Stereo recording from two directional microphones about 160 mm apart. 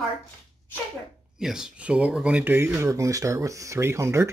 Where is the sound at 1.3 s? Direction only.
5° right (ahead or behind).